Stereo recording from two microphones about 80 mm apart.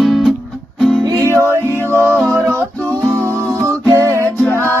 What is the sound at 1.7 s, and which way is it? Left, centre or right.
Music, left.